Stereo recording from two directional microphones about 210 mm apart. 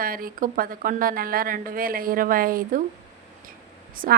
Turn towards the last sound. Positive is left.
turn(degrees=-40)  # may be behind; listen again after turning